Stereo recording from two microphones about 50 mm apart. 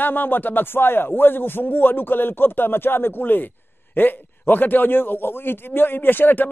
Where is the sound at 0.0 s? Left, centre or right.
Left.